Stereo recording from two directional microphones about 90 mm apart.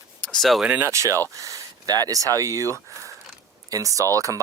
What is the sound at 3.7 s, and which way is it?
Speech, 40° right (ahead or behind).